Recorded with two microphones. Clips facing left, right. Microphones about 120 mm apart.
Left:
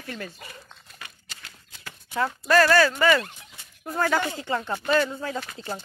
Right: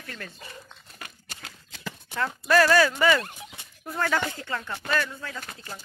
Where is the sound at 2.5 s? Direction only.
5° right (ahead or behind).